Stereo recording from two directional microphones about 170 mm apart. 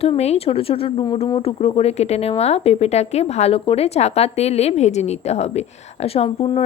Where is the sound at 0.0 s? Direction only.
35° left (ahead or behind).